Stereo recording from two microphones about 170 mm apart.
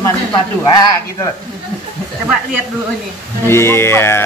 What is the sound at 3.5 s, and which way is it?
Speech, 15° left (ahead or behind).